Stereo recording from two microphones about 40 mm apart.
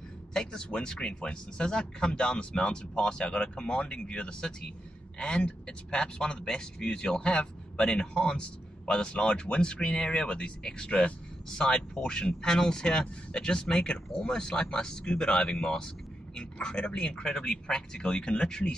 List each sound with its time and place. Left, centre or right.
0.3 s a man's voice: centre
16.6 s a man's voice: left